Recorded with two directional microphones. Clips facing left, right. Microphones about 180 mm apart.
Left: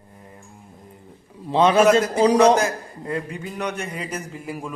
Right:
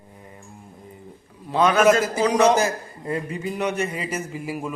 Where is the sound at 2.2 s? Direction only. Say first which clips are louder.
Left 3 dB; 30° left (ahead or behind).